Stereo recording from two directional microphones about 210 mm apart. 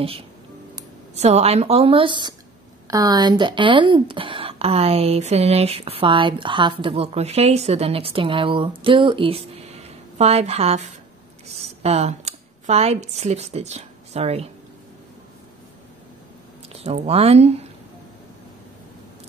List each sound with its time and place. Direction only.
1.1 s a woman's voice: 30° right (ahead or behind)
16.6 s speech: 30° right (ahead or behind)